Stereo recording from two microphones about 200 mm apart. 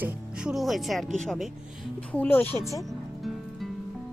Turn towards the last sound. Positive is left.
turn(degrees=0)  # may be behind; listen again after turning